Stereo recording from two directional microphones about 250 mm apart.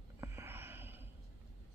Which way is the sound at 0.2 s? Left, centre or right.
Centre.